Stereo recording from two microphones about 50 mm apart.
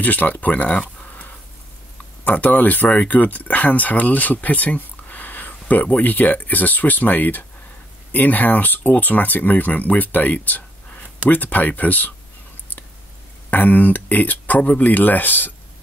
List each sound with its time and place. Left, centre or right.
0.0 s speech: left
13.5 s speech: left